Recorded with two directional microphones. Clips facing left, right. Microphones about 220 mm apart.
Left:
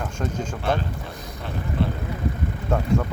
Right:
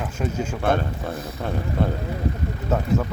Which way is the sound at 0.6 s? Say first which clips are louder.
Right 4 dB; 55° right (ahead or behind).